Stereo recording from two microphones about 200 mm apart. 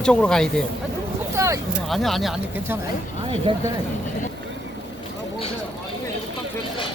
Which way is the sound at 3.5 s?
25° right (ahead or behind).